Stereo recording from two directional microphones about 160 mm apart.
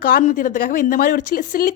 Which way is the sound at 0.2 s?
50° left (ahead or behind).